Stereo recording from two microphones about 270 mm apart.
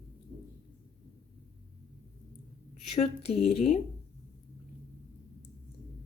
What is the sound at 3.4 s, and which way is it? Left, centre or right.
Speech, left.